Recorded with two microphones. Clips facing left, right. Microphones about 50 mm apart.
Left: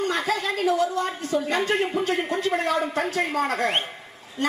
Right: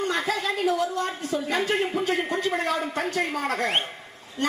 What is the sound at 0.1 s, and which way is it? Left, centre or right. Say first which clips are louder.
A woman's voice: left 1 dB; centre.